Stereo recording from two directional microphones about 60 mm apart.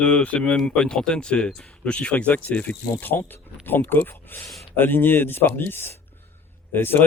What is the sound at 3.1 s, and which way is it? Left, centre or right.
Speech, left.